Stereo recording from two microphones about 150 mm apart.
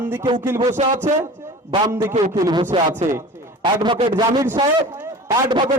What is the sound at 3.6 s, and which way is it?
Speech, 30° right (ahead or behind).